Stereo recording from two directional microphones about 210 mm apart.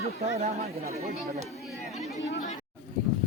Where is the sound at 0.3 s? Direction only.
35° right (ahead or behind).